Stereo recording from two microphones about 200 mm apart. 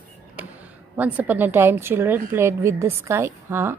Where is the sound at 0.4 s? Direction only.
10° right (ahead or behind).